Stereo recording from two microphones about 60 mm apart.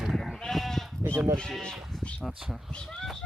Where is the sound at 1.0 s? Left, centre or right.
Right.